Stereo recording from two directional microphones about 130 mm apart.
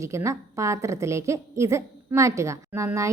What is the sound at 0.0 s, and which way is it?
A woman's voice, 25° right (ahead or behind).